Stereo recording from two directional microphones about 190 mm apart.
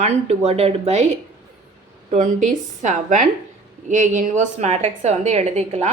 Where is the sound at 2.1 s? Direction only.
40° right (ahead or behind).